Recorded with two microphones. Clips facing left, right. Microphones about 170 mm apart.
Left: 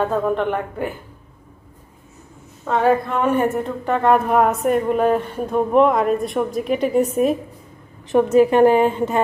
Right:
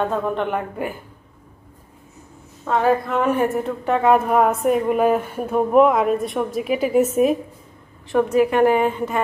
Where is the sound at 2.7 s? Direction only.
Centre (ahead or behind).